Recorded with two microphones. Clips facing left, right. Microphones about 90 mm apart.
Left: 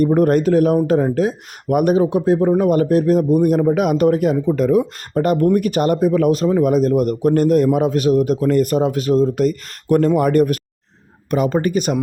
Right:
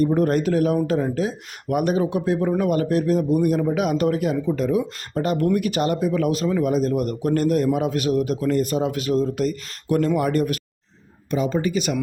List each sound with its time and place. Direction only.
0.0 s a man's voice: 50° left (ahead or behind)
2.0 s a man's voice: 30° left (ahead or behind); by 10.6 s 45° left (ahead or behind)
11.3 s speech: 60° left (ahead or behind); by 11.9 s 45° left (ahead or behind)